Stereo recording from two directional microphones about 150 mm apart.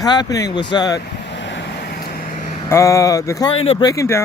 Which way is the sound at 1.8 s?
90° left.